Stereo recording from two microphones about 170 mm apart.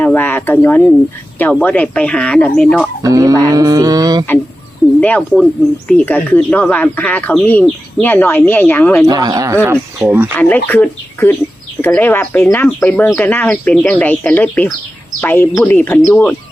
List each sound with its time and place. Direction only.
0.0 s speech: 10° left (ahead or behind)
3.0 s speech: 20° right (ahead or behind)
4.9 s speech: 10° left (ahead or behind)
9.0 s speech: 20° right (ahead or behind)
10.0 s speech: 10° right (ahead or behind)
10.3 s speech: 10° left (ahead or behind)